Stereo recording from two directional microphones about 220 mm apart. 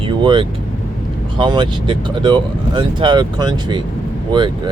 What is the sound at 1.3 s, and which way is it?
Speech, 20° right (ahead or behind).